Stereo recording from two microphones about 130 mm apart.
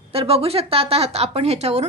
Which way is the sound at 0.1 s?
50° right (ahead or behind).